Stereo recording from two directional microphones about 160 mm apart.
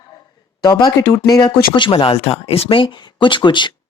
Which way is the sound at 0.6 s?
25° left (ahead or behind).